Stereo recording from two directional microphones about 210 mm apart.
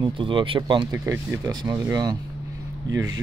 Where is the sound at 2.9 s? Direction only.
65° right (ahead or behind).